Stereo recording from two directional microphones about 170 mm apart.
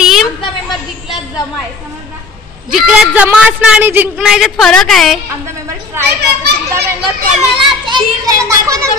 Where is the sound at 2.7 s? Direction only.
5° right (ahead or behind).